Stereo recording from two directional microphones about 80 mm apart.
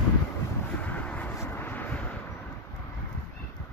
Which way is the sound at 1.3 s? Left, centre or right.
Left.